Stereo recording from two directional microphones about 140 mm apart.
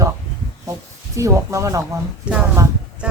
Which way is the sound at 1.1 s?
20° right (ahead or behind).